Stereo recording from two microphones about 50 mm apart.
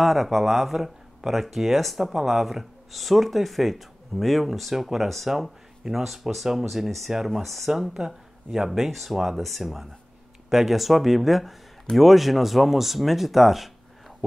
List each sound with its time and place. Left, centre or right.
0.0 s speech: centre